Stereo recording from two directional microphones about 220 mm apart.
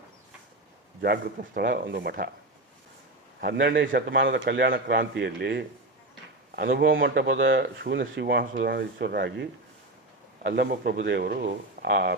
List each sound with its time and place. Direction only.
1.0 s a man's voice: 45° right (ahead or behind)
3.4 s a man's voice: 45° right (ahead or behind)